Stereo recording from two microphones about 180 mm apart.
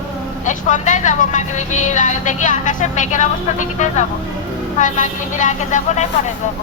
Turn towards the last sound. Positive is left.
turn(degrees=45)  # may be behind; listen again after turning